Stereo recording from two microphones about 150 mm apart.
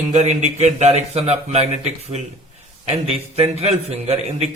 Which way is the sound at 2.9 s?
40° right (ahead or behind).